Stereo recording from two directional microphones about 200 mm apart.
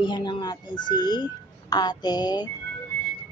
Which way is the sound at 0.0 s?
25° left (ahead or behind).